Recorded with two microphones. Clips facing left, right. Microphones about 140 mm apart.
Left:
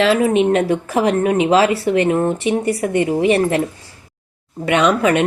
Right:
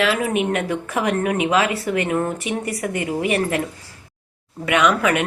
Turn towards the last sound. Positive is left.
turn(degrees=30)  # may be behind; listen again after turning